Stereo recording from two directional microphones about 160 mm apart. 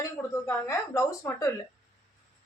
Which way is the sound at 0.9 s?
20° left (ahead or behind).